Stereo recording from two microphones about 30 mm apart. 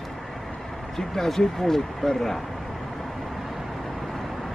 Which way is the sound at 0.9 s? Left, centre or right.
Centre.